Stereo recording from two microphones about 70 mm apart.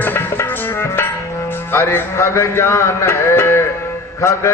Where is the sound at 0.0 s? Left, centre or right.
Left.